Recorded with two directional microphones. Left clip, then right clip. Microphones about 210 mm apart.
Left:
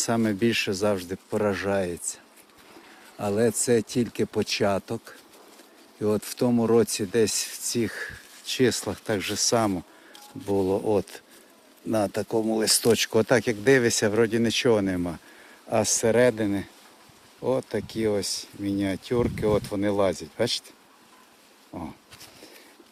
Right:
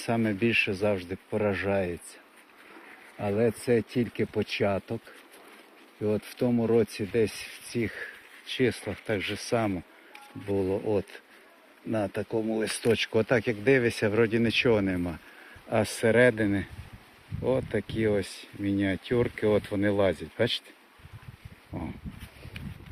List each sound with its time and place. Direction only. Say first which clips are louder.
0.0 s speech: left 3 dB; 20° left (ahead or behind)
3.2 s speech: left 3 dB; 25° left (ahead or behind)
6.0 s speech: left 3 dB; 30° left (ahead or behind); by 20.6 s 5° left (ahead or behind)
21.7 s dog: left 1 dB; 5° left (ahead or behind)